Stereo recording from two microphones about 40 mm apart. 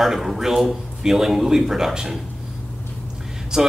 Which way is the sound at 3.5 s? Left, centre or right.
Centre.